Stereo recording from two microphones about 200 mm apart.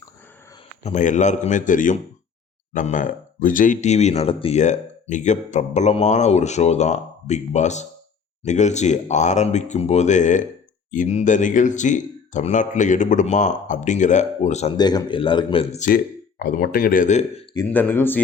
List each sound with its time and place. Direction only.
0.9 s speech: 35° left (ahead or behind)
14.8 s speech: 20° left (ahead or behind)
16.4 s speech: 50° left (ahead or behind)
17.7 s speech: 10° left (ahead or behind)